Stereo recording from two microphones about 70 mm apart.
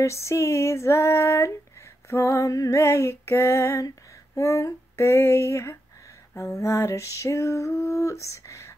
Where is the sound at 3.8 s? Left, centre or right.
Left.